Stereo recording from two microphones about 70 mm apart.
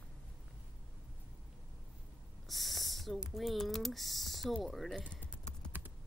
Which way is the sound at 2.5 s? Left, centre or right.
Centre.